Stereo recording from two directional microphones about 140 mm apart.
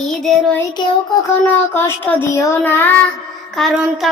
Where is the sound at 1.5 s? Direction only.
15° left (ahead or behind).